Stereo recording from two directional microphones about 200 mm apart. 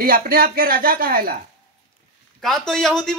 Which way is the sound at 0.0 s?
45° right (ahead or behind).